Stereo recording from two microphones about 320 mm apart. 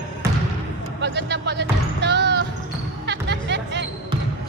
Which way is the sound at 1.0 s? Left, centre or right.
Right.